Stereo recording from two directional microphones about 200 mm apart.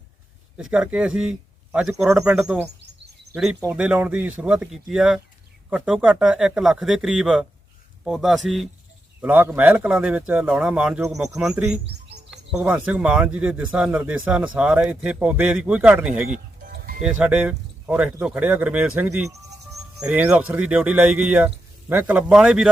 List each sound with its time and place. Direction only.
0.5 s speech: 5° right (ahead or behind)
16.3 s sheep: 45° right (ahead or behind)
17.0 s speech: 5° right (ahead or behind)